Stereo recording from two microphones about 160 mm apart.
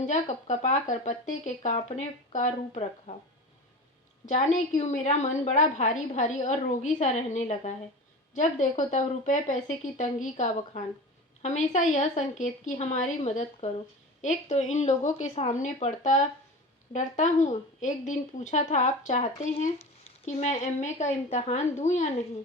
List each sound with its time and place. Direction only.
0.0 s a woman's voice: 45° left (ahead or behind)
4.3 s a woman's voice: 45° left (ahead or behind)